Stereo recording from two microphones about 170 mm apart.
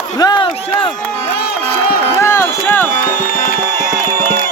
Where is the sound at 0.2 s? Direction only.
25° left (ahead or behind).